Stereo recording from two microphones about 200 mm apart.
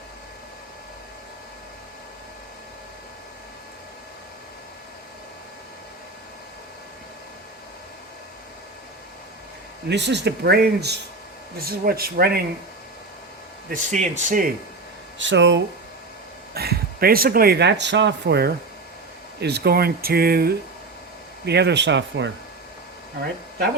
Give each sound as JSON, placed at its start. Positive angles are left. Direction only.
{"t": 9.9, "sound": "speech", "side_deg": -60}
{"t": 13.7, "sound": "speech", "side_deg": -40}
{"t": 15.2, "sound": "speech", "side_deg": -65}
{"t": 16.6, "sound": "speech", "side_deg": -50}